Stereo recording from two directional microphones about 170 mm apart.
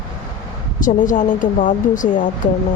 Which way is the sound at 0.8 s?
50° left (ahead or behind).